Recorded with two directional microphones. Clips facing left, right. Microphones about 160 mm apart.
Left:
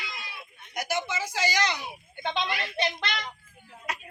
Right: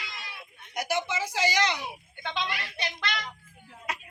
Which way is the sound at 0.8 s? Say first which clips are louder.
Right 1 dB; 30° right (ahead or behind).